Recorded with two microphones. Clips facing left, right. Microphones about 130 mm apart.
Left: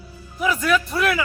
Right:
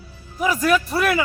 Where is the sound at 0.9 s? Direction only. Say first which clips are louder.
Right 2 dB; 40° right (ahead or behind).